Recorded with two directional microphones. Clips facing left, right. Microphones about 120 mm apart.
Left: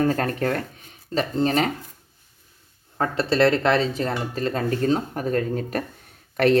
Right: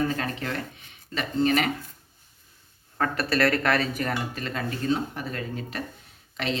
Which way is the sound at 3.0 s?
25° left (ahead or behind).